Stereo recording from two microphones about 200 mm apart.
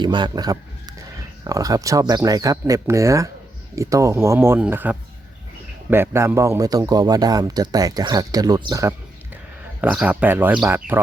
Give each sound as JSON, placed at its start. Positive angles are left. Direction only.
{"t": 0.0, "sound": "a man's voice", "side_deg": -20}